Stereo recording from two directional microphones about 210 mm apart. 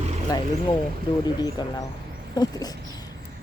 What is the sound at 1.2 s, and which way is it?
Speech, 20° left (ahead or behind).